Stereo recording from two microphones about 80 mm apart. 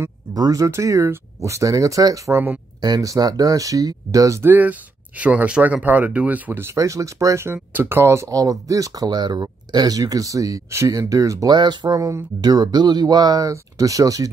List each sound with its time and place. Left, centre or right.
0.3 s speech: right
4.4 s speech: right
6.6 s speech: right
8.3 s speech: right
11.5 s speech: right